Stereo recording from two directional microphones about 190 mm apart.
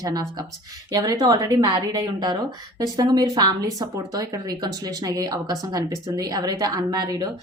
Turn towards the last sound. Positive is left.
turn(degrees=-20)  # may be behind; listen again after turning